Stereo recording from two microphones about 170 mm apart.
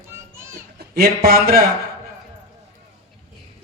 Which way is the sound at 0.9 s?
65° right (ahead or behind).